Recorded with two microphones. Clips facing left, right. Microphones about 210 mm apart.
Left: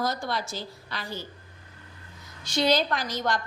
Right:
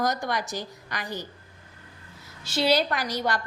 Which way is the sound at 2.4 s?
5° right (ahead or behind).